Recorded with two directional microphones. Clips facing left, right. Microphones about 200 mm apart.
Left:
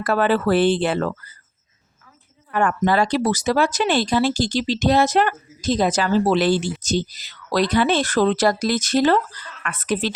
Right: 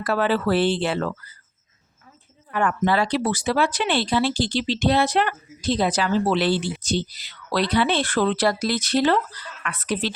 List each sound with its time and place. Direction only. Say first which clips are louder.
0.0 s speech: left 3 dB; 50° left (ahead or behind)
2.5 s speech: left 2 dB; 45° left (ahead or behind)